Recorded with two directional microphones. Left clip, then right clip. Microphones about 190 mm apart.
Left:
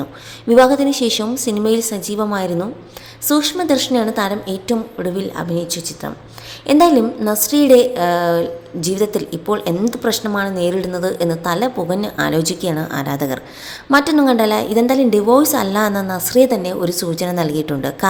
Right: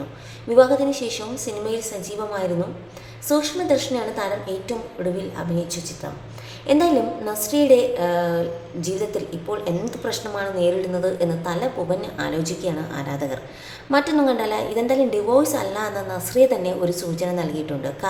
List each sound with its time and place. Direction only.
0.4 s a woman's voice: 45° left (ahead or behind)